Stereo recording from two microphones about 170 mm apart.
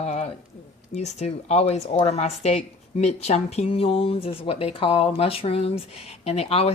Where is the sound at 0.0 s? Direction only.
40° left (ahead or behind).